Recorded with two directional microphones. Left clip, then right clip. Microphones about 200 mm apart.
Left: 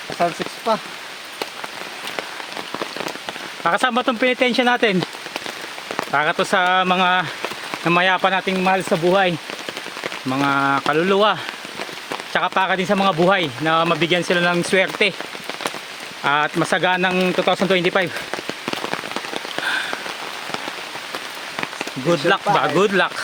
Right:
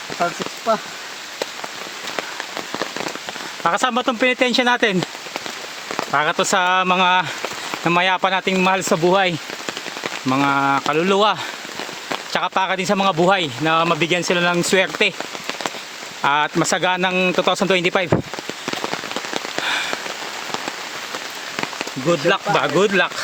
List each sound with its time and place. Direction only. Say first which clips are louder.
3.6 s speech: even; 10° right (ahead or behind)
4.3 s speech: right 1 dB; 15° right (ahead or behind)
6.1 s speech: even; 5° right (ahead or behind); by 9.3 s 30° right (ahead or behind)
10.2 s speech: right 1 dB; 15° right (ahead or behind)
16.2 s speech: right 1 dB; 20° right (ahead or behind)
19.5 s rain on surface: even; 10° right (ahead or behind)
22.1 s speech: left 1 dB; 10° right (ahead or behind)